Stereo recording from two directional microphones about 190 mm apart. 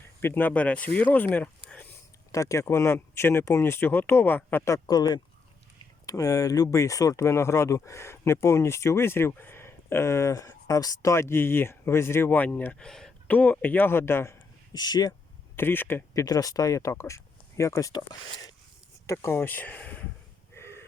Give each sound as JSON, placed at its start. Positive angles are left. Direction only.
{"t": 0.2, "sound": "speech", "side_deg": 10}
{"t": 15.5, "sound": "speech", "side_deg": 10}
{"t": 20.6, "sound": "a sound", "side_deg": 15}